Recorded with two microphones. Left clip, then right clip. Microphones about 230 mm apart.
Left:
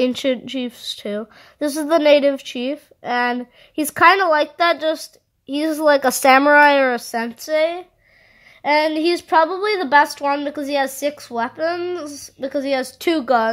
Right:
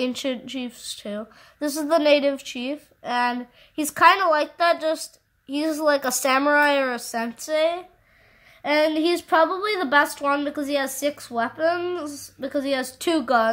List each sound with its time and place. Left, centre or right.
0.0 s a woman's voice: left